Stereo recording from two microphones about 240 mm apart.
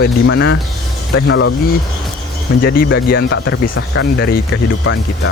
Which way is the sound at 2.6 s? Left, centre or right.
Left.